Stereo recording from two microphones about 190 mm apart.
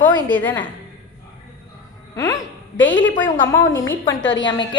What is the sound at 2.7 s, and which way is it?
Speech, 80° left.